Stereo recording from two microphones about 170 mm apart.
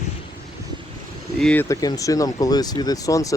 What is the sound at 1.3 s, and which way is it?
Speech, 5° left (ahead or behind).